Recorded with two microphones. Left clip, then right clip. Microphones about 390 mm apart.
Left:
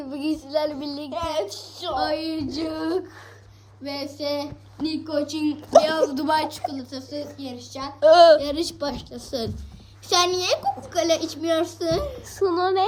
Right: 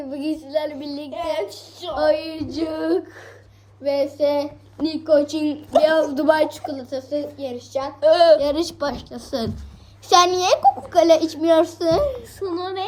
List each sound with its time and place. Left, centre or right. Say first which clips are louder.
0.0 s a child's voice: right 1 dB; centre
2.0 s a child's voice: right 6 dB; centre
8.4 s a child's voice: right 5 dB; centre
12.4 s a woman's voice: left 7 dB; centre